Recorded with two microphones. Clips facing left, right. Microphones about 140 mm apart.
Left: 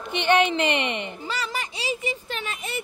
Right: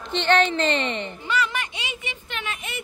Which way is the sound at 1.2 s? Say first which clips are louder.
Right 7 dB; 35° left (ahead or behind).